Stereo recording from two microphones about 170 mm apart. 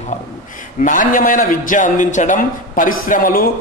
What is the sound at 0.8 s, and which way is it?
Speech, 50° left (ahead or behind).